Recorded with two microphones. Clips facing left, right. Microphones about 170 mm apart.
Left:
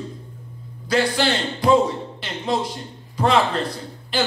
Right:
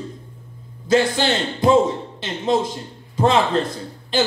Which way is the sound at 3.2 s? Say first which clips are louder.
Right 2 dB; 25° right (ahead or behind).